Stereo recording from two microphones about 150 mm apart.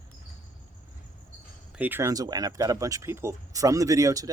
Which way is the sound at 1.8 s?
15° right (ahead or behind).